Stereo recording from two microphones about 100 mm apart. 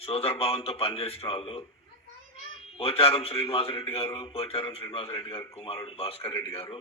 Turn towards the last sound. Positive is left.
turn(degrees=70)  # may be behind; listen again after turning